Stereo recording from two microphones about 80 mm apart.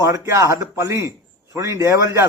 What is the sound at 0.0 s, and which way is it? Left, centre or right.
A man's voice, right.